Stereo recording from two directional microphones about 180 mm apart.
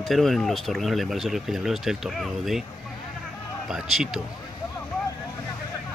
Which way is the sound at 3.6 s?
5° right (ahead or behind).